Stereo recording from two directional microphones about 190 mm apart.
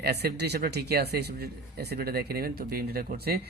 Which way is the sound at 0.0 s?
60° right (ahead or behind).